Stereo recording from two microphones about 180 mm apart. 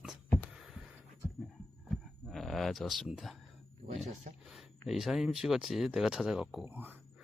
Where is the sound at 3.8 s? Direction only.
50° right (ahead or behind).